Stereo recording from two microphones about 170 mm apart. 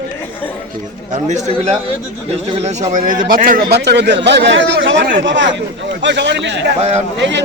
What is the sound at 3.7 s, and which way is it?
Speech, 75° right (ahead or behind).